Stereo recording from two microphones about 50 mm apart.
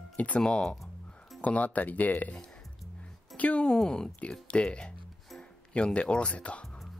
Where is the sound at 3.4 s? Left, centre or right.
Left.